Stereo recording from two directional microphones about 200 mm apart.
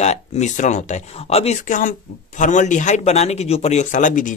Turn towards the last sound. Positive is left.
turn(degrees=40)  # may be behind; listen again after turning